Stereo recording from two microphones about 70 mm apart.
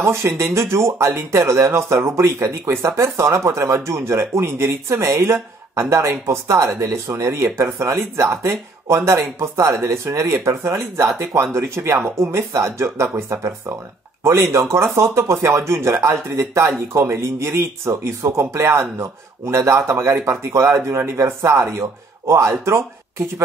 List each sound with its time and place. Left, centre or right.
0.0 s speech: right